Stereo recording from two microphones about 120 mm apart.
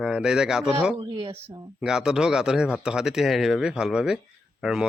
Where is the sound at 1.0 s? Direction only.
45° right (ahead or behind).